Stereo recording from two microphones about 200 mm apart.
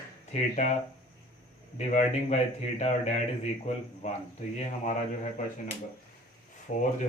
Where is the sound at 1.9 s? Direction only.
35° left (ahead or behind).